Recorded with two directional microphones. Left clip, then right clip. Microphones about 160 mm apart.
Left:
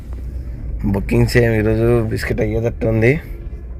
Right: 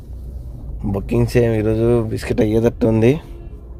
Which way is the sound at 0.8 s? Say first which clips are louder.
Left 2 dB; 10° right (ahead or behind).